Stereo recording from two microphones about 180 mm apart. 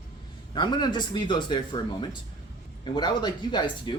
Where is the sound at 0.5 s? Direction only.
25° left (ahead or behind).